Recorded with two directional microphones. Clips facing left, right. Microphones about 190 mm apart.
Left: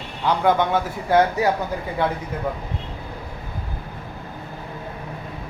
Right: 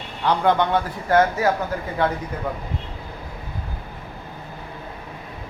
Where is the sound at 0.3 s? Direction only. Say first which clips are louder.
Even; 10° left (ahead or behind).